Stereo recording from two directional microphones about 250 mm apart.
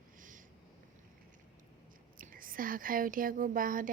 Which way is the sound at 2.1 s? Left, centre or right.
Right.